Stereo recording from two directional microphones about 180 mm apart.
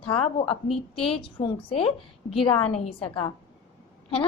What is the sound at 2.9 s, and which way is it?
Speech, 30° left (ahead or behind).